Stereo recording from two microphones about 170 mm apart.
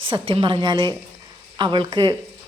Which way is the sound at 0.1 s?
30° right (ahead or behind).